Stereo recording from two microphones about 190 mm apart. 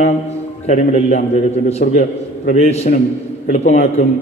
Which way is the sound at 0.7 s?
35° left (ahead or behind).